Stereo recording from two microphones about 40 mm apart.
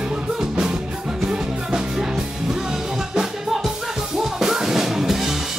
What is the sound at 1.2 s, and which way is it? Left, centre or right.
Music, centre.